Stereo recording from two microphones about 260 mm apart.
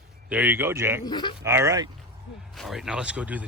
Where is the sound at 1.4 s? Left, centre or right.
Centre.